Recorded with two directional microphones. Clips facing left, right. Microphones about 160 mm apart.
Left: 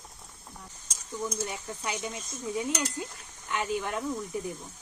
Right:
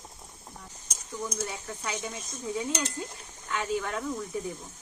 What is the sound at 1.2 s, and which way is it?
Speech, 15° left (ahead or behind).